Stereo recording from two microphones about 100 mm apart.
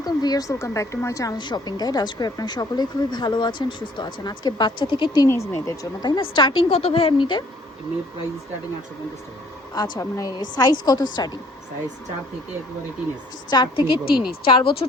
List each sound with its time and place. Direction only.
0.0 s a woman's voice: 40° left (ahead or behind)
1.4 s speech: 45° left (ahead or behind)
5.2 s a woman's voice: 25° left (ahead or behind)
6.1 s a woman's voice: 60° left (ahead or behind)
9.7 s speech: 40° left (ahead or behind)
13.5 s a woman's voice: 50° left (ahead or behind)